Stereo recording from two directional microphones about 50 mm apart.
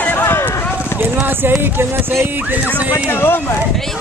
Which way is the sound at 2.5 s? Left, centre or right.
Right.